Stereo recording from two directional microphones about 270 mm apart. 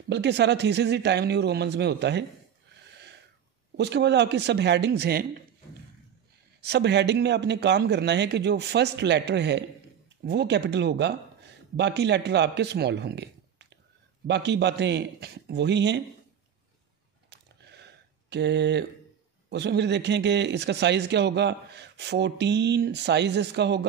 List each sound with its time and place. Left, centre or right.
0.1 s speech: right
3.7 s speech: right
6.6 s a man's voice: right
17.3 s a sound: right
18.3 s speech: right